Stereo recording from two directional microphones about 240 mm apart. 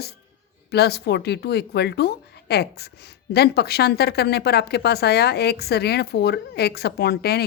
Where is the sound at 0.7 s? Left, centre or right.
Left.